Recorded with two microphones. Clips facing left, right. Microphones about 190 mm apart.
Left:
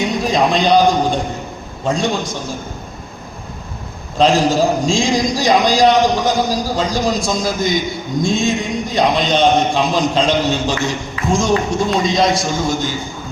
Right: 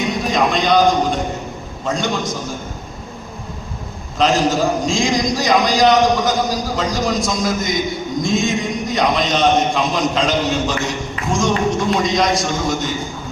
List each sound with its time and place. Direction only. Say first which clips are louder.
0.0 s a man's voice: left 2 dB; 30° left (ahead or behind)
4.2 s a man's voice: left 3 dB; 30° left (ahead or behind)